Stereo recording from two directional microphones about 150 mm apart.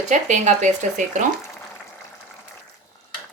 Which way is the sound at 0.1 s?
55° right (ahead or behind).